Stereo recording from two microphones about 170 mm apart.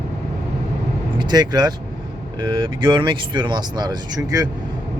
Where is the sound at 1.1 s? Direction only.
25° right (ahead or behind).